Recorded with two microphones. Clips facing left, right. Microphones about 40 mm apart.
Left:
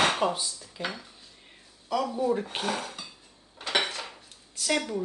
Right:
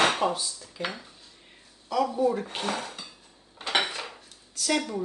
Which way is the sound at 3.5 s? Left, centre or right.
Centre.